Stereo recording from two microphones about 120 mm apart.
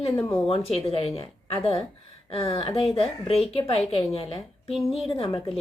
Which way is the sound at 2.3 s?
50° left (ahead or behind).